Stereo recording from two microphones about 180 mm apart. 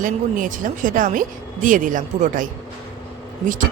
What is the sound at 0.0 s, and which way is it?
Speech, 45° right (ahead or behind).